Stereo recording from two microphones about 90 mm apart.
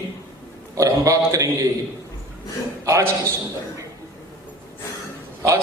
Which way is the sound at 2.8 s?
35° right (ahead or behind).